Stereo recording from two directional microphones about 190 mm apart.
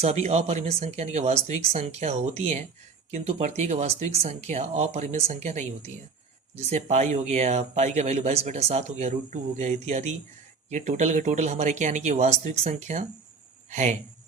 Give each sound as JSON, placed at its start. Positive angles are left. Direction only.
{"t": 0.0, "sound": "speech", "side_deg": -35}